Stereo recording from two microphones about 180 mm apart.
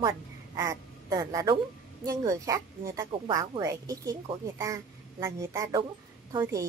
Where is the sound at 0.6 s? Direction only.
15° right (ahead or behind).